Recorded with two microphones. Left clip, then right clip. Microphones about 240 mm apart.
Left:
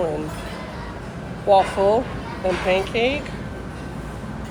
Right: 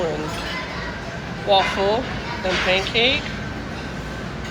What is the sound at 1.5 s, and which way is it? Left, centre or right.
Speech, centre.